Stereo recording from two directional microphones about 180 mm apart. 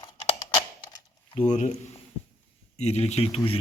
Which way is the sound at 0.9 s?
30° left (ahead or behind).